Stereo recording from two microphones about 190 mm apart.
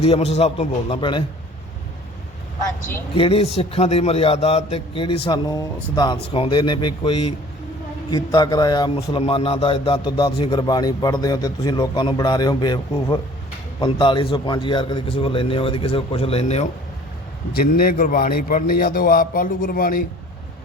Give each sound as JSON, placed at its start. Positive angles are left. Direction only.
{"t": 0.0, "sound": "a man's voice", "side_deg": 30}
{"t": 3.2, "sound": "a man's voice", "side_deg": 30}
{"t": 17.5, "sound": "a man's voice", "side_deg": 50}